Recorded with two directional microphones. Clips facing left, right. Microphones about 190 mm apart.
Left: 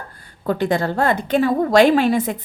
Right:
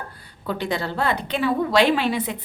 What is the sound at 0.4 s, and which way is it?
A woman's voice, 50° left (ahead or behind).